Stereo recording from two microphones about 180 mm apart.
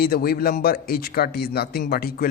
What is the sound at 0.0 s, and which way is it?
Speech, 55° left (ahead or behind).